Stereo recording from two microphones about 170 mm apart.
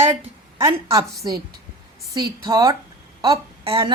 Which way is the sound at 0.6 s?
20° right (ahead or behind).